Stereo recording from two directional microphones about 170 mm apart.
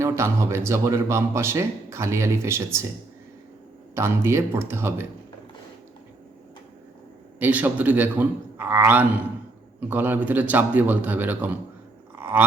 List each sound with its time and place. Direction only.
0.0 s speech: 15° right (ahead or behind)
3.9 s speech: 15° right (ahead or behind)
7.3 s speech: 10° right (ahead or behind)
12.2 s roaring cats: 10° right (ahead or behind)